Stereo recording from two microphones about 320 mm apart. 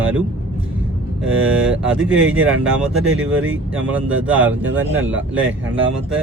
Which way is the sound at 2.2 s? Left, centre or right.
Right.